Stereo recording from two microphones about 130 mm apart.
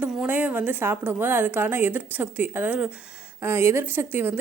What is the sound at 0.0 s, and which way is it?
A woman's voice, 10° right (ahead or behind).